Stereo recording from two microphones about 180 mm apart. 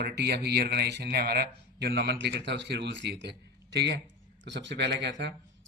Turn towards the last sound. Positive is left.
turn(degrees=-70)  # may be behind; listen again after turning